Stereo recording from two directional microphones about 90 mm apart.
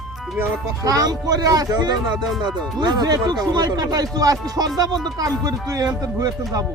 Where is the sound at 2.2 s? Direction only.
5° right (ahead or behind).